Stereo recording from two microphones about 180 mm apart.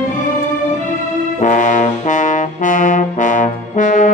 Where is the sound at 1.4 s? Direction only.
45° left (ahead or behind).